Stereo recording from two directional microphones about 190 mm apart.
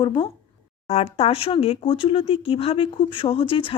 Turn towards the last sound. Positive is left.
turn(degrees=30)  # may be behind; listen again after turning